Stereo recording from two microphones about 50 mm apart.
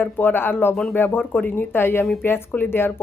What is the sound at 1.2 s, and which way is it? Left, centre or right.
Speech, left.